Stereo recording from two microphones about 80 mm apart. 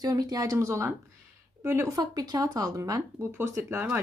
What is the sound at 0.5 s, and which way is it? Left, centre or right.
Speech, right.